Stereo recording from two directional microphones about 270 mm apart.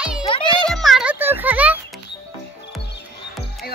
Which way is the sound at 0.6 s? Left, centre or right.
Centre.